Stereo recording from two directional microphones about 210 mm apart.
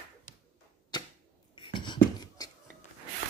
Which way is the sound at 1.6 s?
25° left (ahead or behind).